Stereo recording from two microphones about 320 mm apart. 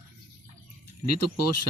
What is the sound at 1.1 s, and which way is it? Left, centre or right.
Speech, left.